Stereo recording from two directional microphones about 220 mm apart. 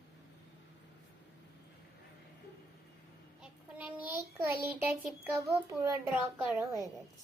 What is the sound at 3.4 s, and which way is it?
A child's voice, 5° right (ahead or behind).